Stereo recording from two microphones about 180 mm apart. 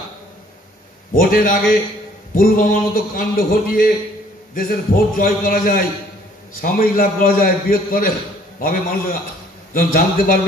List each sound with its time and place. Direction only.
1.1 s a man's voice: 50° left (ahead or behind)